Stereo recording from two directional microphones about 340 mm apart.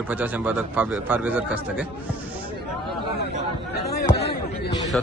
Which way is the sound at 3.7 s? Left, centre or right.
Left.